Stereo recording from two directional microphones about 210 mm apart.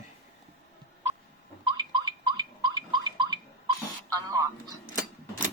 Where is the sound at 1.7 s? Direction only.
20° right (ahead or behind).